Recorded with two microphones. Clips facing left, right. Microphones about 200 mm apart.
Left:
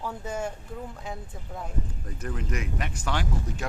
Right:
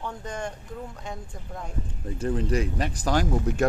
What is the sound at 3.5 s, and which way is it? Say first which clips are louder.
Speech: right 10 dB; 60° right (ahead or behind).